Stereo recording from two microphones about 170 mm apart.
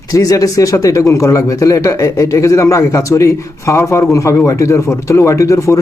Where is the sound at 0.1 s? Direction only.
20° left (ahead or behind).